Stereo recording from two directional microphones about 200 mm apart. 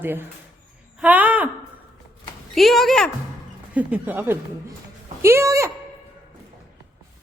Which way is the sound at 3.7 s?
10° right (ahead or behind).